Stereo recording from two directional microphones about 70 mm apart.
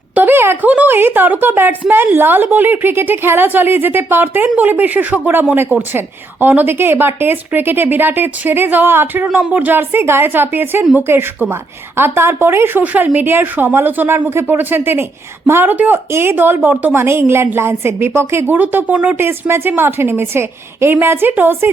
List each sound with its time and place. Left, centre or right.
0.1 s a woman's voice: right
15.7 s a woman's voice: right